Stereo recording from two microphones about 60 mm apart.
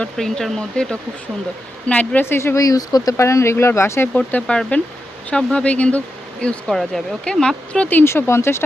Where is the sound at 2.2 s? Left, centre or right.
Left.